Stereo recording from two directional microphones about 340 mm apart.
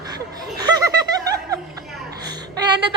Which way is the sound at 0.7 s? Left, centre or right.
Centre.